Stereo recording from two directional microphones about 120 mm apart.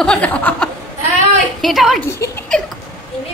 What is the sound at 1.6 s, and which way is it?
Speech, centre (ahead or behind).